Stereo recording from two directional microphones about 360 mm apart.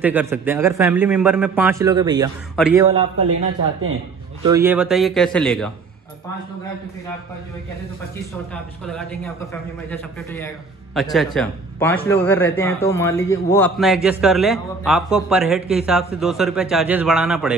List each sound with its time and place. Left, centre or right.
0.0 s a man's voice: centre
4.5 s speech: centre
8.8 s speech: centre